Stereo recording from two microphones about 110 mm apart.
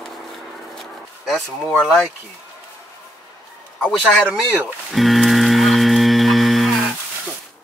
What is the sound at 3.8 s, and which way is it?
Speech, 10° left (ahead or behind).